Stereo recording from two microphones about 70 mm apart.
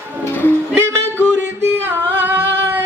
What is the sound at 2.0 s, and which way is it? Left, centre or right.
Singing, right.